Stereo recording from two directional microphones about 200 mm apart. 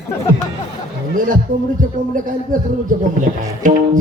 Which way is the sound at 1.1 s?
40° right (ahead or behind).